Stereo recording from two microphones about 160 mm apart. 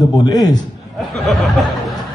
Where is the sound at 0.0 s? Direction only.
25° left (ahead or behind).